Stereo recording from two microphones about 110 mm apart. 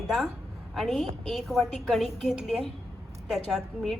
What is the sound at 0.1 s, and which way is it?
A woman's voice, centre (ahead or behind).